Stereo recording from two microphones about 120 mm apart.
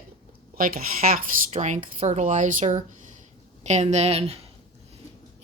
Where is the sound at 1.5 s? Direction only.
80° right.